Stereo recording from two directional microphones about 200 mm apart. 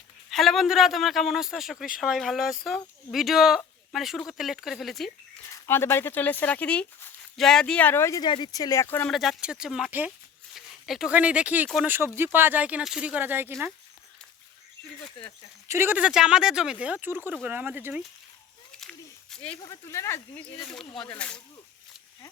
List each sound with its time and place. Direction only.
0.3 s speech: centre (ahead or behind)
5.6 s speech: 10° left (ahead or behind); by 13.7 s 10° right (ahead or behind)
15.6 s speech: 15° right (ahead or behind)
18.7 s a sound: 5° left (ahead or behind)
19.6 s speech: 15° left (ahead or behind)
21.2 s speech: 5° left (ahead or behind)